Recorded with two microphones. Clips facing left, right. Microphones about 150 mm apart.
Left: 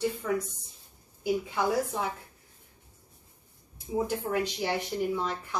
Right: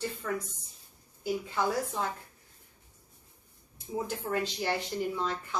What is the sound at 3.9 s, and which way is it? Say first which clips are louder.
Speech: left 4 dB; 5° left (ahead or behind).